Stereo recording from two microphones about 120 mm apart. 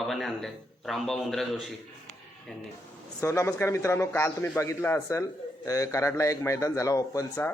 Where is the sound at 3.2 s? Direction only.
25° left (ahead or behind).